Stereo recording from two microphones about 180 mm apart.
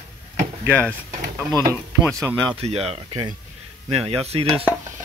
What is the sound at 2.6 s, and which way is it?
Speech, 35° right (ahead or behind).